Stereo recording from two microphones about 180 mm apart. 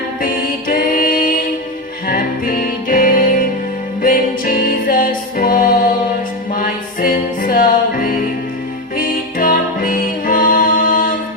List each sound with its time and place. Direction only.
0.7 s music: 50° left (ahead or behind)